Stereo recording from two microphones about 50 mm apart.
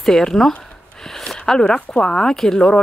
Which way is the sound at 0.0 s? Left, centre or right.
Centre.